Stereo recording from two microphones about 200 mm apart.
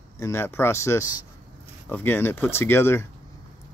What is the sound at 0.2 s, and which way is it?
Speech, 10° left (ahead or behind).